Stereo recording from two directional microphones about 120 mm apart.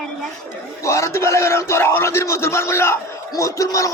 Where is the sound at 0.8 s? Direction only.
25° left (ahead or behind).